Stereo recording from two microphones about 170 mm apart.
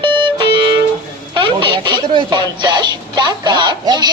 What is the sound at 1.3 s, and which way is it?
Radio, 30° right (ahead or behind).